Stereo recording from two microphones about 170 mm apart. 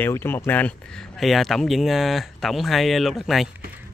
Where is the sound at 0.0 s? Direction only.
15° left (ahead or behind).